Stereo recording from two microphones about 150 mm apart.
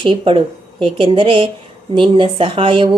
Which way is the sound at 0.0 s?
35° right (ahead or behind).